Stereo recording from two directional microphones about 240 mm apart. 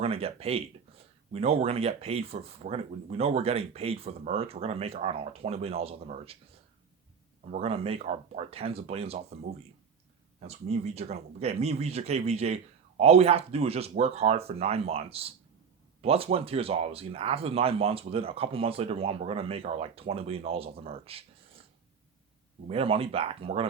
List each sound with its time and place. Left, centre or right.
0.0 s speech: right
7.5 s speech: right
10.4 s speech: right
22.6 s speech: right